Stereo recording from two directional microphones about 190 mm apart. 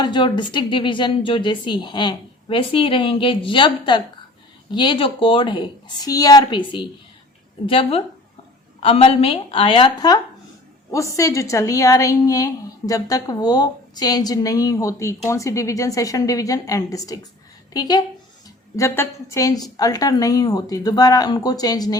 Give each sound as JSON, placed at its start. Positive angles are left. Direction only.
{"t": 0.0, "sound": "a woman's voice", "side_deg": 25}